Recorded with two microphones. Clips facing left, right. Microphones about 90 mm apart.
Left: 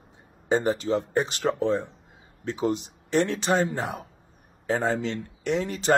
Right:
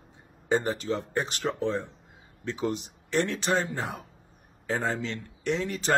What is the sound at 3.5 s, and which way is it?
Speech, 45° left (ahead or behind).